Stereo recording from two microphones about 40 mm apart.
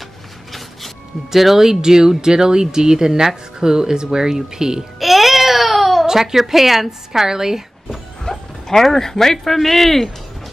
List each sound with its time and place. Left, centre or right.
0.5 s speech: centre
4.9 s baby cry: centre
6.0 s speech: centre
7.9 s speech: centre